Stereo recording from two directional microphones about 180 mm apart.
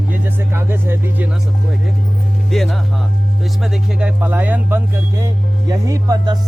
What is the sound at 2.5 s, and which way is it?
Speech, centre (ahead or behind).